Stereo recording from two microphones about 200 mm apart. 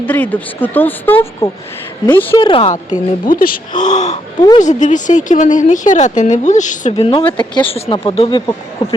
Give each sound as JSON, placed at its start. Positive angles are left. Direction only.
{"t": 0.0, "sound": "speech", "side_deg": 10}
{"t": 2.4, "sound": "speech", "side_deg": 25}
{"t": 3.2, "sound": "a woman's voice", "side_deg": 45}
{"t": 4.4, "sound": "speech", "side_deg": 20}
{"t": 4.6, "sound": "a woman's voice", "side_deg": 40}
{"t": 6.9, "sound": "speech", "side_deg": 25}